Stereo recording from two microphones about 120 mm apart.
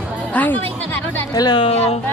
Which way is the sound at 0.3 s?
15° left (ahead or behind).